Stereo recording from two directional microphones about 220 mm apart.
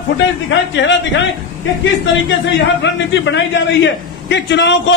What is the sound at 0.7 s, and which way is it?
A man's voice, 55° left (ahead or behind).